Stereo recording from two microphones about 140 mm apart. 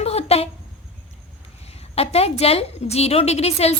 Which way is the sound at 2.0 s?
45° left (ahead or behind).